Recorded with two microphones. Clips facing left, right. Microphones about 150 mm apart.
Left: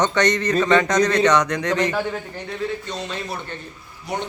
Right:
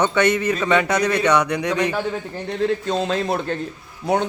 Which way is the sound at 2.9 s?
65° right (ahead or behind).